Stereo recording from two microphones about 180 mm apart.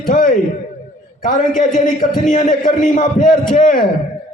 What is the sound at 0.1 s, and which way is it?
A man's voice, 50° left (ahead or behind).